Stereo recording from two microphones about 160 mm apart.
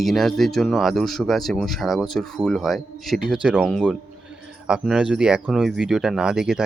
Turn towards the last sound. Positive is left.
turn(degrees=-5)  # may be behind; listen again after turning